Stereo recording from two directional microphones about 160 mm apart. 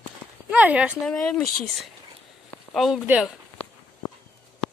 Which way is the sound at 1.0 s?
5° left (ahead or behind).